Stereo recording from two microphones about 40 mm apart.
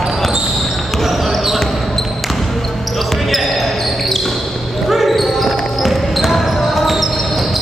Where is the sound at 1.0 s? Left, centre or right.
Centre.